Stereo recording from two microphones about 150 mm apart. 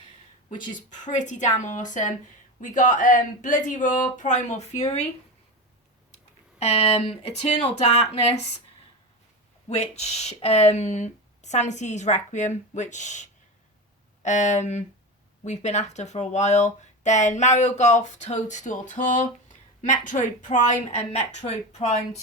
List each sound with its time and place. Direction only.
0.5 s speech: 55° left (ahead or behind)
6.6 s speech: 45° left (ahead or behind)
9.6 s speech: 45° left (ahead or behind)